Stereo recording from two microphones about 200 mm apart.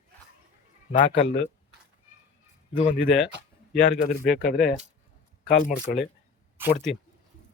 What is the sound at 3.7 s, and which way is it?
Speech, 60° left (ahead or behind).